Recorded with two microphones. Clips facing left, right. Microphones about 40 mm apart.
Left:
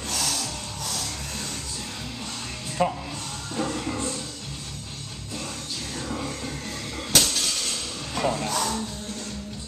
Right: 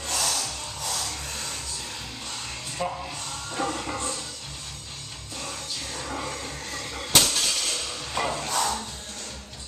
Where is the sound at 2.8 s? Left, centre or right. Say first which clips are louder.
Left 6 dB; left.